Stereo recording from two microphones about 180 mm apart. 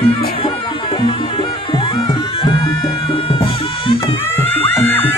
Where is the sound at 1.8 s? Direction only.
25° left (ahead or behind).